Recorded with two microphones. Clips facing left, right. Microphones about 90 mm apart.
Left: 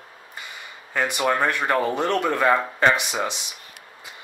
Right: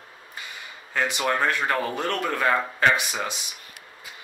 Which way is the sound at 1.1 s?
15° left (ahead or behind).